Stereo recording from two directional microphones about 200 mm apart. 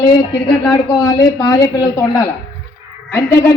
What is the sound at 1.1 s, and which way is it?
A woman's voice, 20° left (ahead or behind).